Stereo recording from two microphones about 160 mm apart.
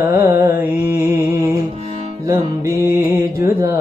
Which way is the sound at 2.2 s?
20° right (ahead or behind).